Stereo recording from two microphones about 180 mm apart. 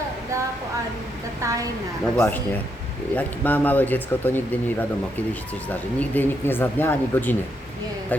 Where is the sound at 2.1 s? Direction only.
15° left (ahead or behind).